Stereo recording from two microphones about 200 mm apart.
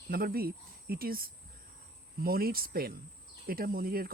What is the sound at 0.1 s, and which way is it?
Speech, 45° right (ahead or behind).